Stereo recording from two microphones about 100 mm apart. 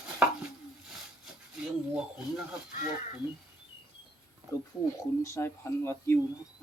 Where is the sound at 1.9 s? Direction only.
5° right (ahead or behind).